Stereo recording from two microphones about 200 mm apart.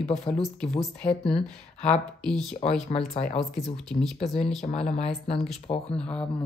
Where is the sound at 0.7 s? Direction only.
5° left (ahead or behind).